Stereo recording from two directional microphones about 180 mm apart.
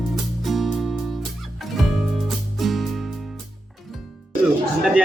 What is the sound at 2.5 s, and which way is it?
Music, centre (ahead or behind).